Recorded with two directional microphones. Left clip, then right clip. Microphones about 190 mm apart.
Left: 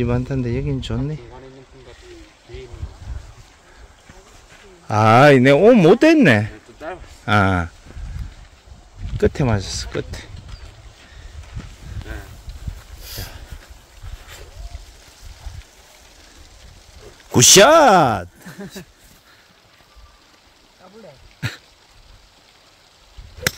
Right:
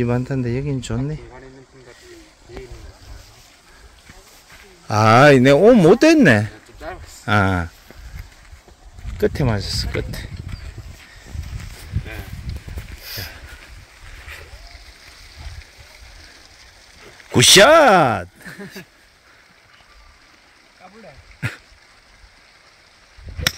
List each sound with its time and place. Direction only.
0.0 s speech: 5° right (ahead or behind)
4.8 s speech: 5° right (ahead or behind)
7.2 s speech: 5° left (ahead or behind)
9.2 s speech: 15° left (ahead or behind)
13.0 s a sound: 35° left (ahead or behind)
17.3 s speech: 10° left (ahead or behind)